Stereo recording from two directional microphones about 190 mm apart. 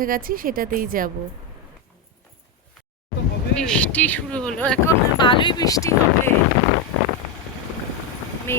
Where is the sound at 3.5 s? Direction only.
5° left (ahead or behind).